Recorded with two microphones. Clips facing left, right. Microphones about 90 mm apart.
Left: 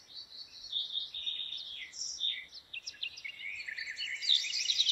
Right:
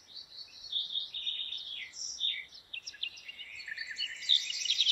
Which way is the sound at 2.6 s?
45° right (ahead or behind).